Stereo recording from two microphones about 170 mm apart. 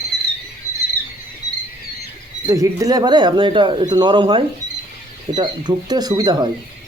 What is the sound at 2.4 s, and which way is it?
Speech, 20° right (ahead or behind).